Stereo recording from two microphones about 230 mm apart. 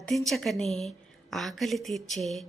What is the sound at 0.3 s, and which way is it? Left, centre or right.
A woman's voice, centre.